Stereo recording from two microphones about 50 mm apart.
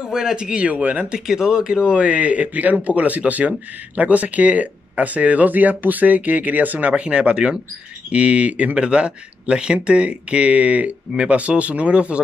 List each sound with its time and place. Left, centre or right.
0.0 s speech: centre
0.7 s speech: right
1.2 s a man's voice: centre; by 6.9 s right
6.9 s speech: right